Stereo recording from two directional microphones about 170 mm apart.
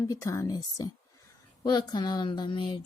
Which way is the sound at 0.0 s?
20° left (ahead or behind).